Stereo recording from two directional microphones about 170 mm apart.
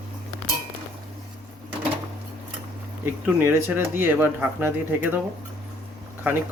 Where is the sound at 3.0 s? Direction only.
15° right (ahead or behind).